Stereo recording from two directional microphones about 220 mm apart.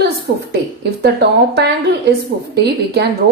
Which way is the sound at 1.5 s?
50° right (ahead or behind).